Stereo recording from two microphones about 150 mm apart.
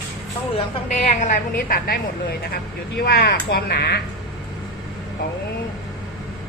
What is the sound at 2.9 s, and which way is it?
Speech, 90° left.